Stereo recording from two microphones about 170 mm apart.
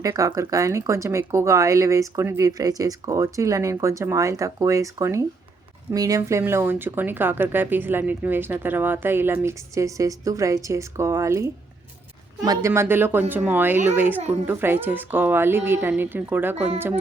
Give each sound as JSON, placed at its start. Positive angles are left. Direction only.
{"t": 0.0, "sound": "speech", "side_deg": -20}